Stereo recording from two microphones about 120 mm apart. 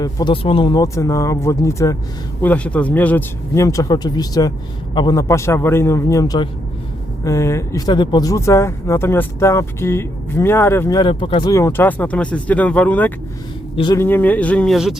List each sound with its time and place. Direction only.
0.0 s speech: 30° left (ahead or behind)
0.4 s speech: 50° left (ahead or behind)
0.7 s speech: 30° left (ahead or behind)
2.4 s speech: 10° left (ahead or behind)
3.5 s speech: 25° left (ahead or behind)
11.1 s speech: 45° left (ahead or behind)
11.5 s speech: 20° left (ahead or behind)